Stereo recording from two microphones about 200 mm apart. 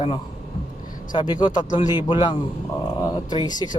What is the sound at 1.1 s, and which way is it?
Speech, 25° left (ahead or behind).